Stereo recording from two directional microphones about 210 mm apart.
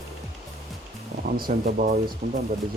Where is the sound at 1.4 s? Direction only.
45° right (ahead or behind).